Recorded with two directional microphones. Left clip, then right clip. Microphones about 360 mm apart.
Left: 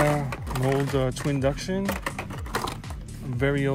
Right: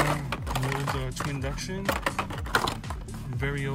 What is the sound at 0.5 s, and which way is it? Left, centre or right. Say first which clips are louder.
Speech: left 6 dB; centre.